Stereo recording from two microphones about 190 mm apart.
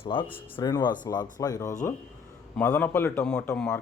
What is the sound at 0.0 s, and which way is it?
A man's voice, 25° left (ahead or behind).